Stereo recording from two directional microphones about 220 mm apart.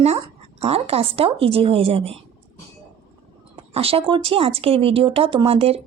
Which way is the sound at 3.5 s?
25° right (ahead or behind).